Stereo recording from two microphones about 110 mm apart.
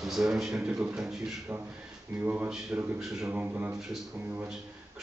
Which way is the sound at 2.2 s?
15° right (ahead or behind).